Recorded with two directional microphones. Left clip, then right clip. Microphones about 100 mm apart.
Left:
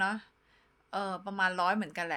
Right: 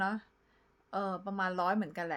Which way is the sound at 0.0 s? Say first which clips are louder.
Left 3 dB; 45° right (ahead or behind).